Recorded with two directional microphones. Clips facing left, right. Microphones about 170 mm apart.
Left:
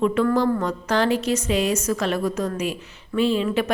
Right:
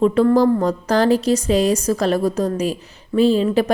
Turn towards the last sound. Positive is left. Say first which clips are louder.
# right 5 dB
turn(degrees=-35)  # may be behind; listen again after turning